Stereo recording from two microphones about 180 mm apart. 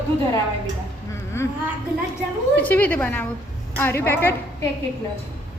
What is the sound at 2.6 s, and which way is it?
A woman's voice, 10° left (ahead or behind).